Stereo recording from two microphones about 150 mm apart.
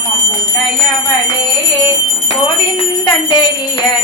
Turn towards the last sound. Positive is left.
turn(degrees=30)  # may be behind; listen again after turning